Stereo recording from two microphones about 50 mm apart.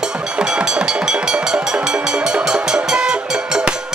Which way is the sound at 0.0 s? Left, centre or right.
Centre.